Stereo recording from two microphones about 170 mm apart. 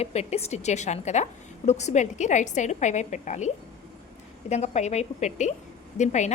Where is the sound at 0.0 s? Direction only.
40° left (ahead or behind).